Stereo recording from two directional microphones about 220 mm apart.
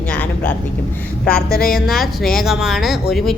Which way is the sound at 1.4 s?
40° left (ahead or behind).